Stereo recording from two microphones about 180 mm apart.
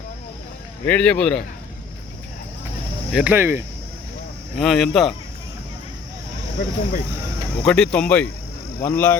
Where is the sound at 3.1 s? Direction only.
10° right (ahead or behind).